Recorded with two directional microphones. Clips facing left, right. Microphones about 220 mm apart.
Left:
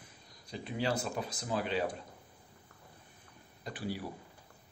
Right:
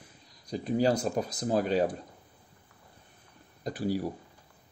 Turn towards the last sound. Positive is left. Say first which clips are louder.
# right 8 dB
turn(degrees=-40)  # may be behind; listen again after turning